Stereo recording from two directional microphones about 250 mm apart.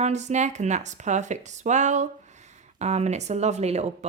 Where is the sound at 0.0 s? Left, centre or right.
Right.